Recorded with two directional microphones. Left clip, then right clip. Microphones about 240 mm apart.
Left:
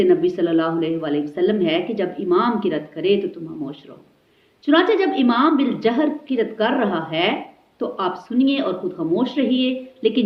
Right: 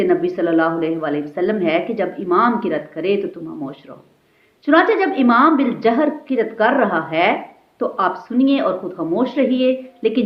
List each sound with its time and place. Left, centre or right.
0.0 s speech: right
4.6 s speech: right